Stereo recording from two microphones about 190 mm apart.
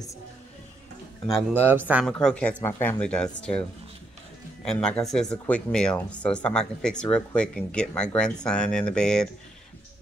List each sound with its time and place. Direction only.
1.6 s speech: 10° right (ahead or behind)
2.0 s speech: 5° left (ahead or behind)
4.6 s speech: 5° left (ahead or behind)